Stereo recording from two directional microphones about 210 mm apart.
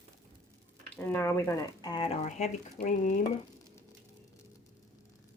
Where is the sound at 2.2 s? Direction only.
35° left (ahead or behind).